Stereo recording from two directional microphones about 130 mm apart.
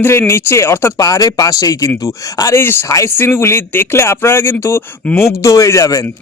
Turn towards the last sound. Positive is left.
turn(degrees=25)  # may be behind; listen again after turning